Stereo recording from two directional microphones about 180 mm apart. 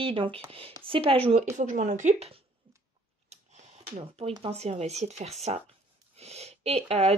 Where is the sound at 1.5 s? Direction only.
45° right (ahead or behind).